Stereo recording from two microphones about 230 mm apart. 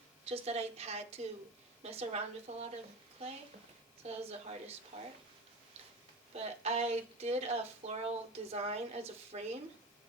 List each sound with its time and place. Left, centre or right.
0.3 s a woman's voice: right
6.3 s a woman's voice: right